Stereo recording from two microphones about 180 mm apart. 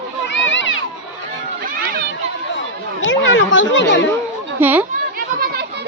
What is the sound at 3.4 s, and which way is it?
Speech, 90° left.